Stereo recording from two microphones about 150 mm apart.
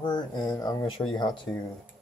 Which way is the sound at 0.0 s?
30° left (ahead or behind).